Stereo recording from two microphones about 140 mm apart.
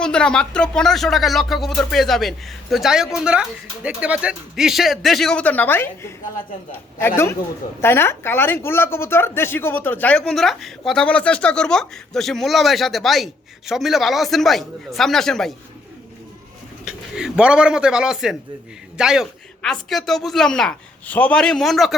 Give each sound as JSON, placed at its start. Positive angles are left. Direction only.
{"t": 0.0, "sound": "a woman's voice", "side_deg": 5}
{"t": 16.8, "sound": "a woman's voice", "side_deg": -5}